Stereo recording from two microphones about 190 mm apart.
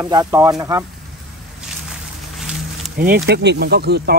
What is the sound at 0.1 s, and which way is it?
Speech, 20° right (ahead or behind).